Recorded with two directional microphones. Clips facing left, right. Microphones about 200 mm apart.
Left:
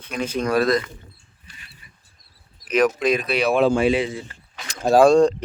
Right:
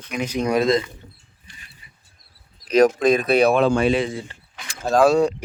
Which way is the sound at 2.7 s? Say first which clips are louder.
Right 3 dB; 45° right (ahead or behind).